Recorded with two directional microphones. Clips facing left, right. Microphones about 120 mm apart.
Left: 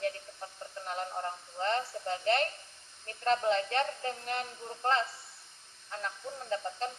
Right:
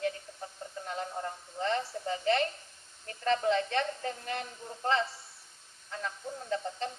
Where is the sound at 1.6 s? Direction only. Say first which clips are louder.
Even; 45° left (ahead or behind).